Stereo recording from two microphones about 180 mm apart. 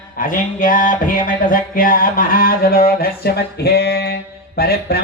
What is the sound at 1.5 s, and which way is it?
Mantra, 50° left (ahead or behind).